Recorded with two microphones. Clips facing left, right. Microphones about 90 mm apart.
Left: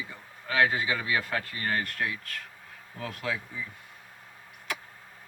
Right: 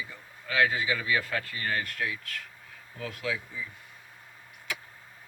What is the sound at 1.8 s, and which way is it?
Speech, 45° left (ahead or behind).